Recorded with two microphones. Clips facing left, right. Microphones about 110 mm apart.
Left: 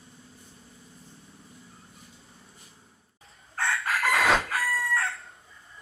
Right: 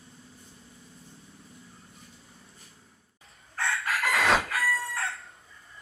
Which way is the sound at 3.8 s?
30° left (ahead or behind).